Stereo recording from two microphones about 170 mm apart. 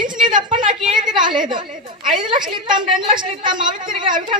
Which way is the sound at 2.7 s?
30° right (ahead or behind).